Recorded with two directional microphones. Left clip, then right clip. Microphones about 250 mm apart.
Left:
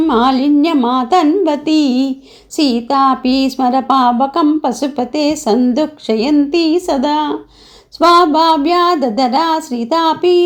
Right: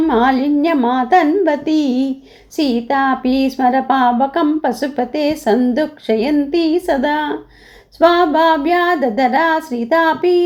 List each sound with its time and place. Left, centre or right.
0.1 s a woman's voice: centre